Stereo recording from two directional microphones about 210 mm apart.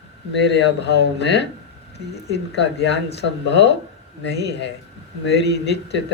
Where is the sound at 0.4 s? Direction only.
55° left (ahead or behind).